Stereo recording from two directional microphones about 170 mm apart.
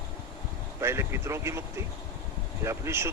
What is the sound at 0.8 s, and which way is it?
Speech, 15° right (ahead or behind).